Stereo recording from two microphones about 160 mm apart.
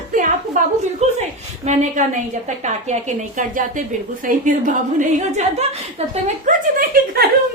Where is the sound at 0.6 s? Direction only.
55° right (ahead or behind).